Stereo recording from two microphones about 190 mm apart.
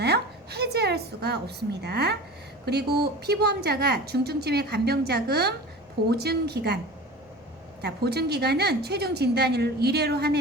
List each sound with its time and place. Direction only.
0.0 s a woman's voice: 60° right (ahead or behind)
7.8 s a woman's voice: 60° right (ahead or behind)